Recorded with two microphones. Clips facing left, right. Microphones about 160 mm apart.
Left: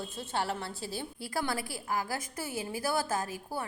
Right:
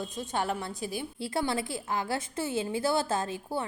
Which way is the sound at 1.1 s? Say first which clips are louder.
Right 4 dB; 25° right (ahead or behind).